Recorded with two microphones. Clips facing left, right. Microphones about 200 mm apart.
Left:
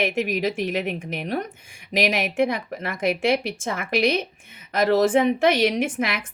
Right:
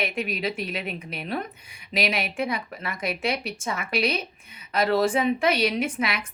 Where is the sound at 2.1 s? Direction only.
50° left (ahead or behind).